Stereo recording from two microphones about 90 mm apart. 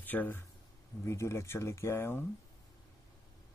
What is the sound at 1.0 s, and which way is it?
Speech, 30° left (ahead or behind).